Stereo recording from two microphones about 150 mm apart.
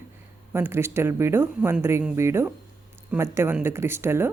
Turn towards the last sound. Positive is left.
turn(degrees=-15)  # may be behind; listen again after turning